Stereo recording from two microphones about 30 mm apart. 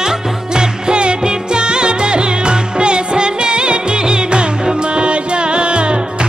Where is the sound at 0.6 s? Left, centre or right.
Right.